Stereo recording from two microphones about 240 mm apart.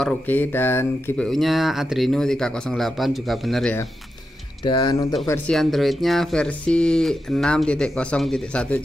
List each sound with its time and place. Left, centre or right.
0.0 s speech: centre
4.6 s speech: centre
5.1 s speech: centre